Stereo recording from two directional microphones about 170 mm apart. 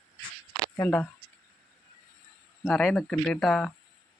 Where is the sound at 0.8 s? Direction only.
10° left (ahead or behind).